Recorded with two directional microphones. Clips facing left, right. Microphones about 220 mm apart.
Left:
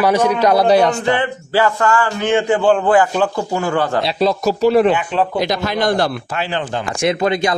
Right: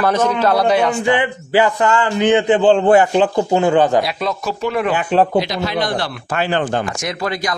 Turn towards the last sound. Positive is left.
turn(degrees=25)  # may be behind; listen again after turning